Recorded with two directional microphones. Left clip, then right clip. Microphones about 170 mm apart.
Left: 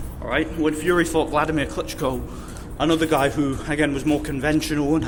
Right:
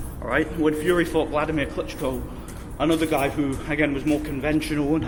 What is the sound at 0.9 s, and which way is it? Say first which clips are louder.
Speech: left 2 dB; 20° left (ahead or behind).